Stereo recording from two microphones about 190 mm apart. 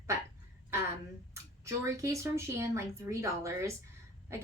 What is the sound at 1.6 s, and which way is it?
Speech, 15° right (ahead or behind).